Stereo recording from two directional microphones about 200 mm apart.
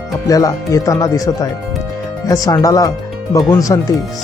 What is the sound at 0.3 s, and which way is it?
Speech, 15° left (ahead or behind).